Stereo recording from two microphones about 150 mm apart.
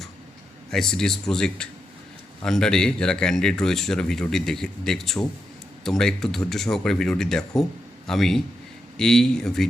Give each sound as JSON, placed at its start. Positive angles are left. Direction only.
{"t": 0.7, "sound": "speech", "side_deg": 5}